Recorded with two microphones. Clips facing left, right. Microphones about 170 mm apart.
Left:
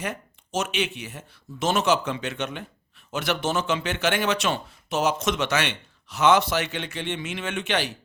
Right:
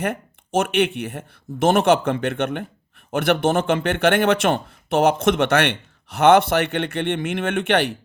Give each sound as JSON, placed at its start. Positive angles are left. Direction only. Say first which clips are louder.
{"t": 0.0, "sound": "speech", "louder": "right 7 dB", "side_deg": -55}